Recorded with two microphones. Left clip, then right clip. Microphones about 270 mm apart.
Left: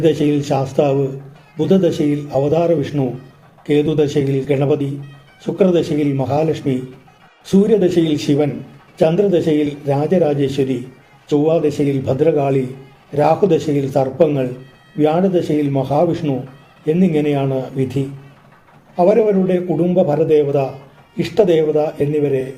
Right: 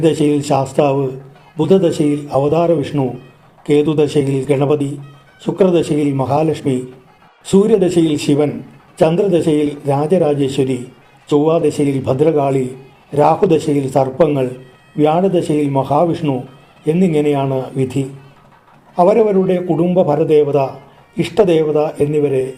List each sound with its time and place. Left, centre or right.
0.0 s a man's voice: right
2.0 s a man's voice: right